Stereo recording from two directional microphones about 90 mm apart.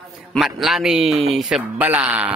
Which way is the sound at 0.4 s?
5° right (ahead or behind).